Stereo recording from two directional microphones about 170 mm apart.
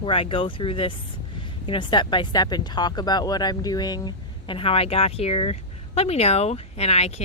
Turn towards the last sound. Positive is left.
turn(degrees=40)  # may be behind; listen again after turning